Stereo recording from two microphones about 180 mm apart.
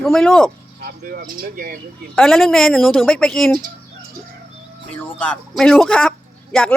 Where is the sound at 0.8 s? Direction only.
55° right (ahead or behind).